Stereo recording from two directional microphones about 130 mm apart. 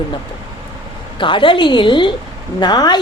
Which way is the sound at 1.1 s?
40° left (ahead or behind).